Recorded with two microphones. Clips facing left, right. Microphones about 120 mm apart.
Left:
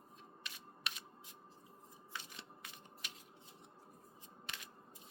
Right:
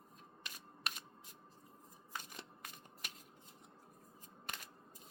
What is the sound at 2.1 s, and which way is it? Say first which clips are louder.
Shuffling cards: right 2 dB; 45° right (ahead or behind).